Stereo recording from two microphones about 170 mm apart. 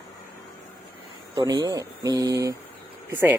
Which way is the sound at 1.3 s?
25° right (ahead or behind).